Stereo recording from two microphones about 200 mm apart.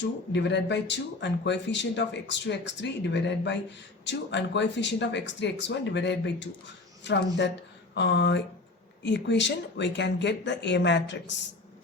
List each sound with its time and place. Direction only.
0.0 s speech: 60° left (ahead or behind)